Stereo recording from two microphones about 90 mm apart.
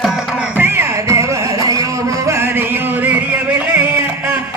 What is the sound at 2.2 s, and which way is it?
Music, 25° right (ahead or behind).